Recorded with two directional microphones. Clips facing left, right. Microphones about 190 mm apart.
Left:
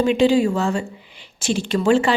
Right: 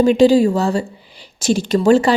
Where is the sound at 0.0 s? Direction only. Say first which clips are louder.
Right 5 dB; 40° right (ahead or behind).